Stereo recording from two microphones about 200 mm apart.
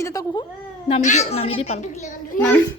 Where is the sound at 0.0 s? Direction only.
15° left (ahead or behind).